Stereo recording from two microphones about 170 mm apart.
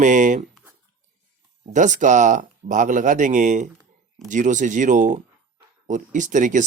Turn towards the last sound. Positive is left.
turn(degrees=-50)  # may be behind; listen again after turning